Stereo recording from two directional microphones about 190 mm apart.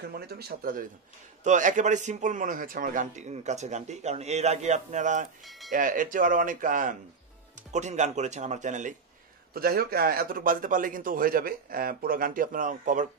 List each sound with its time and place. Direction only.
0.0 s a man's voice: 55° right (ahead or behind)
1.4 s a man's voice: 40° right (ahead or behind)
5.4 s speech: centre (ahead or behind)
5.7 s a man's voice: 45° right (ahead or behind)
9.5 s a man's voice: 50° right (ahead or behind)